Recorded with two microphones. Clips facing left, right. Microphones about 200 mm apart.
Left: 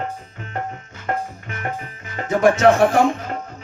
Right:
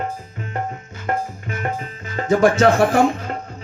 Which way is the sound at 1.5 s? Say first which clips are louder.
Right 3 dB; 25° right (ahead or behind).